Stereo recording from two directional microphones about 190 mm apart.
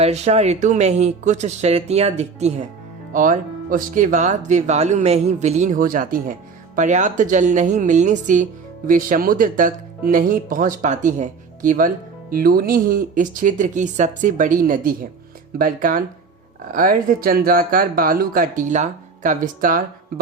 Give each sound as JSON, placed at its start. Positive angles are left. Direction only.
{"t": 0.0, "sound": "speech", "side_deg": -35}